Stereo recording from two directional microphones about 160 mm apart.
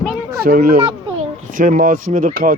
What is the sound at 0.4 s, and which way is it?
Speech, 70° right (ahead or behind).